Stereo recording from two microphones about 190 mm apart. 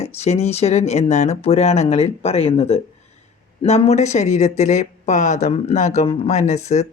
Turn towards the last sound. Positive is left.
turn(degrees=35)  # may be behind; listen again after turning